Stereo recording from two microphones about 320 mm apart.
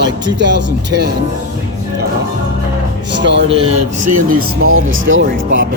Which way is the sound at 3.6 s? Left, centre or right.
Right.